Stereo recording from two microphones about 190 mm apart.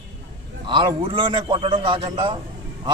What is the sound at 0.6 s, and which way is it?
A man's voice, 25° right (ahead or behind).